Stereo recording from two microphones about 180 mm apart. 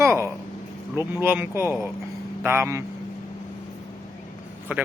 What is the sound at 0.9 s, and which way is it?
Speech, 10° right (ahead or behind).